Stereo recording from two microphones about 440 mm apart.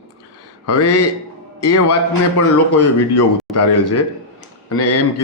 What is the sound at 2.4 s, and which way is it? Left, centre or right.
A man's voice, left.